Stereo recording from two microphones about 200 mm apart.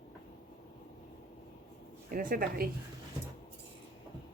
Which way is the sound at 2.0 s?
45° right (ahead or behind).